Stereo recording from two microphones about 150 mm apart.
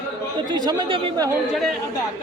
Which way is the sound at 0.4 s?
30° right (ahead or behind).